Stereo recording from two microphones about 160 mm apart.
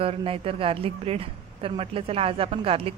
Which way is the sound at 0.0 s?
35° right (ahead or behind).